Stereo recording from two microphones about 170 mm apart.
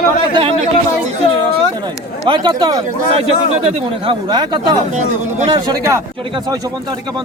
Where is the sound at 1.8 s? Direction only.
30° right (ahead or behind).